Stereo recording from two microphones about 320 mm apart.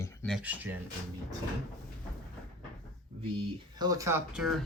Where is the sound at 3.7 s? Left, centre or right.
Centre.